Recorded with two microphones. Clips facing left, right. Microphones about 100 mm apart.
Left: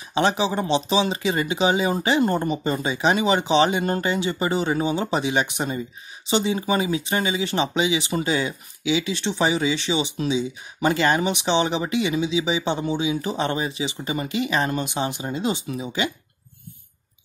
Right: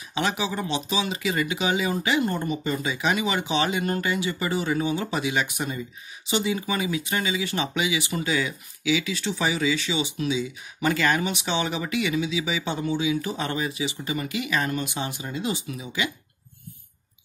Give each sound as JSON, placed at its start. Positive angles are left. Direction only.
{"t": 0.1, "sound": "speech", "side_deg": 30}